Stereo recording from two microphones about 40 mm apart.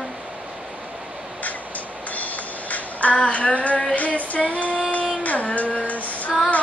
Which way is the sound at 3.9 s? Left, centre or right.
Left.